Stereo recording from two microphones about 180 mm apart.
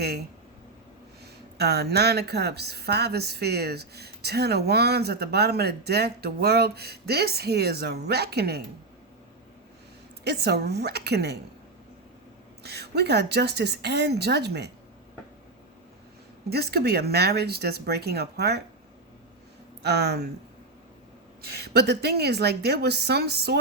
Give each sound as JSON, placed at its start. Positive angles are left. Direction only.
{"t": 1.2, "sound": "speech", "side_deg": -65}
{"t": 10.2, "sound": "speech", "side_deg": -65}
{"t": 12.6, "sound": "a woman's voice", "side_deg": -65}
{"t": 16.5, "sound": "speech", "side_deg": -60}
{"t": 19.8, "sound": "speech", "side_deg": -65}
{"t": 21.4, "sound": "speech", "side_deg": -60}